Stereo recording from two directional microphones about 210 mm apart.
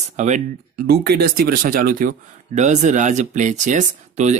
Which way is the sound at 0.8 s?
50° right (ahead or behind).